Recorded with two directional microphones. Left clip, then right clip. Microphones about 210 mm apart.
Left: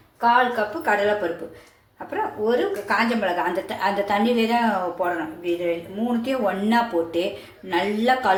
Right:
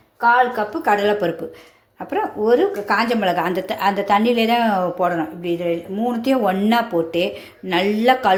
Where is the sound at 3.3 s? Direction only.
45° right (ahead or behind).